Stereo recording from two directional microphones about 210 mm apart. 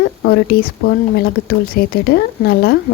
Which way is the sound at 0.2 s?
50° left (ahead or behind).